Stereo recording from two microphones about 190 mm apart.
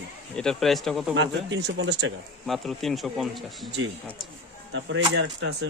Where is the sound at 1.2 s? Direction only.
70° right (ahead or behind).